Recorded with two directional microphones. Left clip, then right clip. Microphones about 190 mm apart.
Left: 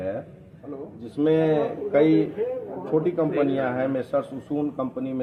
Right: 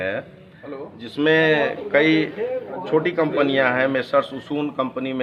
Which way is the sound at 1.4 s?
10° right (ahead or behind).